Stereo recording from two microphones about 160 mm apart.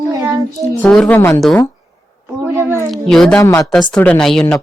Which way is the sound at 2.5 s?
15° right (ahead or behind).